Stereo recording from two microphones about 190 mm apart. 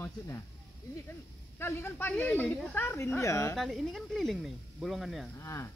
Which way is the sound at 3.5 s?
Centre (ahead or behind).